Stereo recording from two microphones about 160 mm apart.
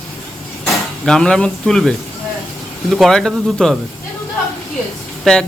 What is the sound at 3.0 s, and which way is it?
Speech, centre (ahead or behind).